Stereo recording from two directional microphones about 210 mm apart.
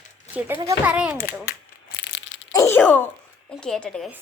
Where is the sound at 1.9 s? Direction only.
60° left (ahead or behind).